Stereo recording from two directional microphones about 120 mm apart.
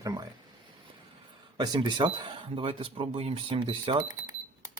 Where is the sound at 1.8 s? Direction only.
40° right (ahead or behind).